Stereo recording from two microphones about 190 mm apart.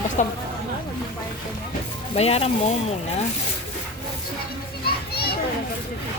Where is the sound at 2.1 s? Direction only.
30° left (ahead or behind).